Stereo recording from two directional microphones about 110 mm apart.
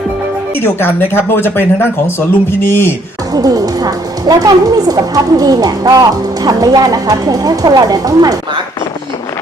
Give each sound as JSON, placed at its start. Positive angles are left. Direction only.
{"t": 0.6, "sound": "speech", "side_deg": 20}
{"t": 3.4, "sound": "a woman's voice", "side_deg": -35}